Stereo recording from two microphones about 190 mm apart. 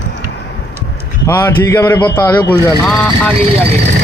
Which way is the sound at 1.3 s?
10° left (ahead or behind).